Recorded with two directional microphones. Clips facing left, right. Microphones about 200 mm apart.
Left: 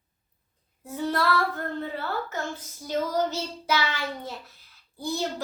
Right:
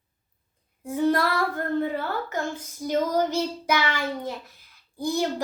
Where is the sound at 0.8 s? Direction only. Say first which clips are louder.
Right 4 dB; 15° right (ahead or behind).